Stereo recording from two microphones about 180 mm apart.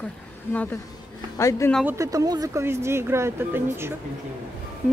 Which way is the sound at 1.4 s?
15° left (ahead or behind).